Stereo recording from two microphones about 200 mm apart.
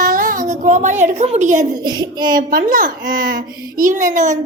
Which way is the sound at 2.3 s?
45° right (ahead or behind).